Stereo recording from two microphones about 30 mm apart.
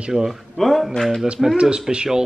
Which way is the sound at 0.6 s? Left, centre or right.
Centre.